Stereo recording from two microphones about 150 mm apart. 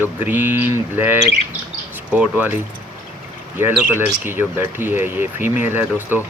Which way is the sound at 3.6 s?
10° right (ahead or behind).